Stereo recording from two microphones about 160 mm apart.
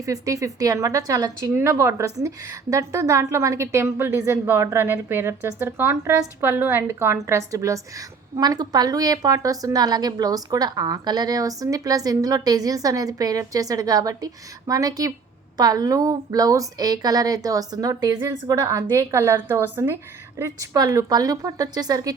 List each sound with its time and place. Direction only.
0.0 s a woman's voice: 20° right (ahead or behind)